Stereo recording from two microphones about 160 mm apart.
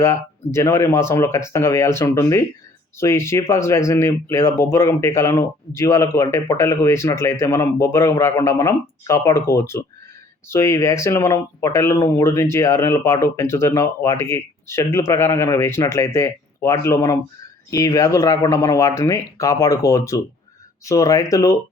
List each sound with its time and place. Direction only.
0.0 s speech: 15° left (ahead or behind)